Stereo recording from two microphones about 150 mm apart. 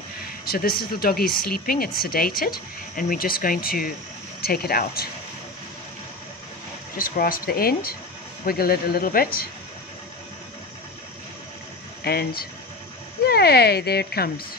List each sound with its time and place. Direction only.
0.5 s speech: 85° left
4.4 s speech: 90° left
7.0 s speech: 70° left (ahead or behind)
12.0 s speech: 90° left